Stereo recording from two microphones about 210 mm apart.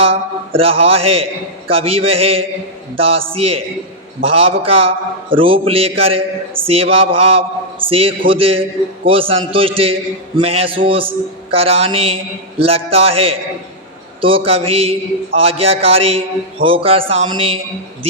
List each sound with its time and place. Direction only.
0.0 s a man's voice: 25° right (ahead or behind)